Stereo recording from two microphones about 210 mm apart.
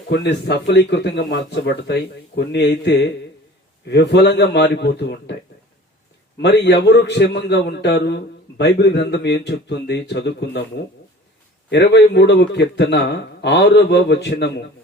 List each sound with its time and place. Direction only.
0.1 s a man's voice: 55° left (ahead or behind)
6.4 s a man's voice: 55° left (ahead or behind)
11.7 s a man's voice: 55° left (ahead or behind)